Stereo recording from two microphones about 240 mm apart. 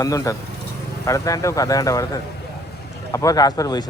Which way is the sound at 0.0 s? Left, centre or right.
Centre.